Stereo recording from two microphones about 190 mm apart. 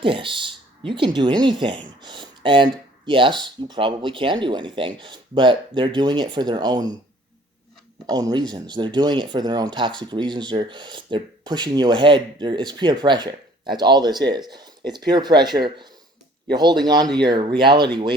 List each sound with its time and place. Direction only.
0.0 s speech: 25° right (ahead or behind)
8.0 s speech: 20° right (ahead or behind)